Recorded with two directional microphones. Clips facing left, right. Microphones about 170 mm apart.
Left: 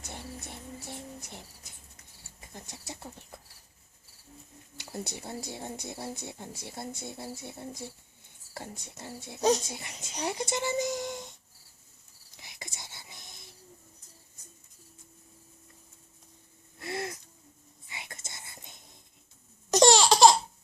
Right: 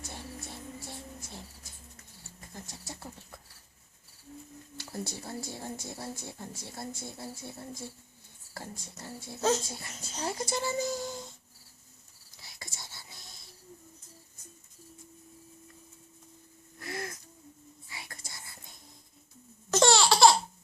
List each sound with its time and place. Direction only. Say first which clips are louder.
0.0 s a sound: even; 20° left (ahead or behind)
2.5 s speech: left 1 dB; 20° left (ahead or behind)
4.8 s speech: even; 20° left (ahead or behind)
12.4 s whispering: left 2 dB; 20° left (ahead or behind)
16.8 s gasp: left 3 dB; 25° left (ahead or behind)
17.8 s whispering: left 2 dB; 20° left (ahead or behind)
19.7 s laughter: left 3 dB; 15° left (ahead or behind)